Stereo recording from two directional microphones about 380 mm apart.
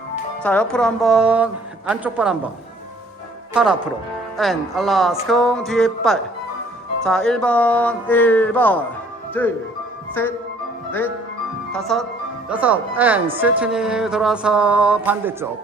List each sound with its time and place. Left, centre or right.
0.4 s a woman's voice: centre
3.5 s a woman's voice: centre
11.7 s a woman's voice: centre